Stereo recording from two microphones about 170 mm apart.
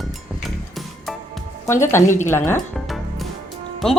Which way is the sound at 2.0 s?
45° left (ahead or behind).